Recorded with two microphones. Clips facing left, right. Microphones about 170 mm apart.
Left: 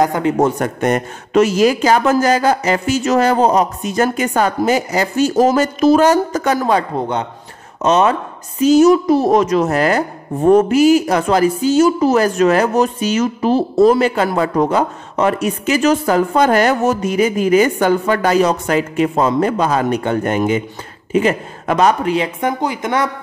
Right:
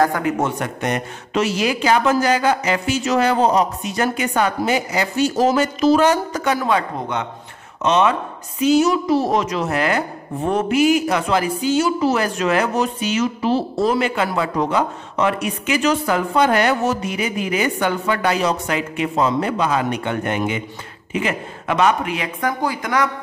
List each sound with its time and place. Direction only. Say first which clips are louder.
0.0 s a woman's voice: left 4 dB; 25° left (ahead or behind)